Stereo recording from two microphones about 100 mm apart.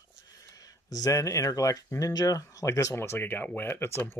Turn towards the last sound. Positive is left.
turn(degrees=25)  # may be behind; listen again after turning